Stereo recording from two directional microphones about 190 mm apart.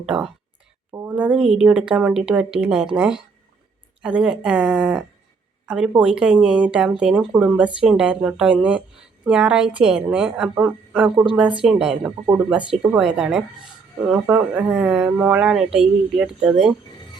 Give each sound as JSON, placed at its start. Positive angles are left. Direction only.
{"t": 0.0, "sound": "speech", "side_deg": -5}
{"t": 0.9, "sound": "a sound", "side_deg": -20}
{"t": 1.1, "sound": "speech", "side_deg": -5}